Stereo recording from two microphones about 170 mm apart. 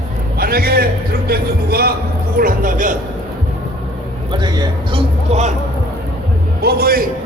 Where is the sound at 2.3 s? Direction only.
55° right (ahead or behind).